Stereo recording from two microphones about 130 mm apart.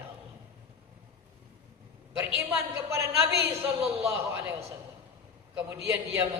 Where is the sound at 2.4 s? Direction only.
20° right (ahead or behind).